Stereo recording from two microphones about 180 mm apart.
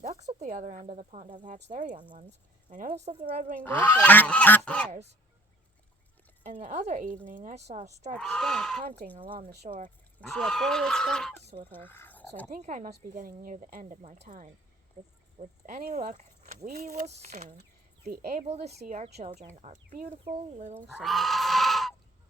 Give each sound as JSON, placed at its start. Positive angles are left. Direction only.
{"t": 0.0, "sound": "a woman's voice", "side_deg": -40}
{"t": 3.6, "sound": "speech", "side_deg": 10}
{"t": 6.4, "sound": "a woman's voice", "side_deg": -45}
{"t": 8.2, "sound": "speech", "side_deg": 5}
{"t": 9.1, "sound": "speech", "side_deg": -30}
{"t": 10.2, "sound": "speech", "side_deg": 5}
{"t": 12.5, "sound": "a woman's voice", "side_deg": -40}
{"t": 18.0, "sound": "speech", "side_deg": -60}
{"t": 18.3, "sound": "speech", "side_deg": -35}
{"t": 19.9, "sound": "a woman's voice", "side_deg": -50}
{"t": 21.0, "sound": "goat", "side_deg": 0}